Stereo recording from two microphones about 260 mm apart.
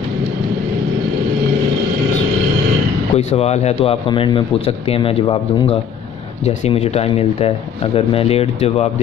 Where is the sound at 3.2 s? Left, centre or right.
Left.